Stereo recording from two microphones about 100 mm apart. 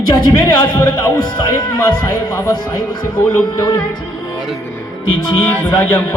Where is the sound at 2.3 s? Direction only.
40° left (ahead or behind).